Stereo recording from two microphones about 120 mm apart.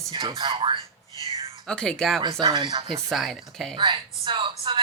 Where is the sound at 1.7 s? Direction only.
5° left (ahead or behind).